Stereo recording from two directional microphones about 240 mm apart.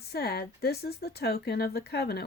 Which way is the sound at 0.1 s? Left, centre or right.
Left.